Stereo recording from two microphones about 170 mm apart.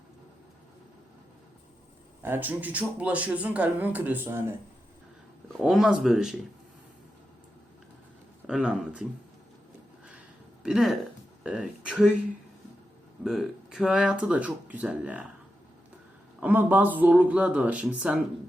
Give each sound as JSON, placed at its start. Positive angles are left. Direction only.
{"t": 2.2, "sound": "speech", "side_deg": -10}
{"t": 5.5, "sound": "speech", "side_deg": -5}
{"t": 8.4, "sound": "speech", "side_deg": -5}
{"t": 10.6, "sound": "speech", "side_deg": 0}
{"t": 13.2, "sound": "speech", "side_deg": 0}
{"t": 16.4, "sound": "speech", "side_deg": -10}